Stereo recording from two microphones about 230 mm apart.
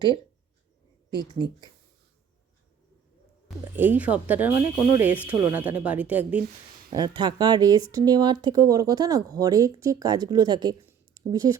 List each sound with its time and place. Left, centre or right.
1.1 s speech: centre
3.8 s speech: centre
6.9 s speech: centre